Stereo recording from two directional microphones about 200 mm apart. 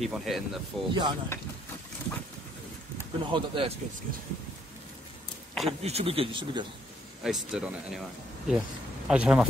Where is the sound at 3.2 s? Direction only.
25° right (ahead or behind).